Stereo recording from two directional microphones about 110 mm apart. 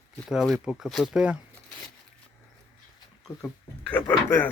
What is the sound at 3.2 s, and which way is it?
Speech, 10° left (ahead or behind).